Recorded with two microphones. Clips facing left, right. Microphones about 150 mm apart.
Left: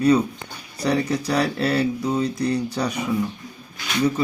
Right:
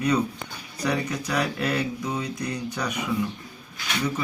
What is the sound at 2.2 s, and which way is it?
Speech, 10° right (ahead or behind).